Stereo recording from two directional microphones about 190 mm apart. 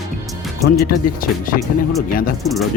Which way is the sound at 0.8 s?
50° left (ahead or behind).